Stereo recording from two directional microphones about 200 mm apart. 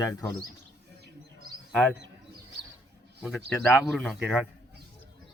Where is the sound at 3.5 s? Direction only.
10° left (ahead or behind).